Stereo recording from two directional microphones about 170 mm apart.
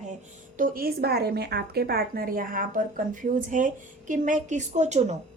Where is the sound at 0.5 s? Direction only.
55° right (ahead or behind).